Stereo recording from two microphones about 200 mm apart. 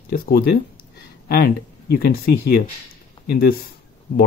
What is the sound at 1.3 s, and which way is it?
Speech, 50° left (ahead or behind).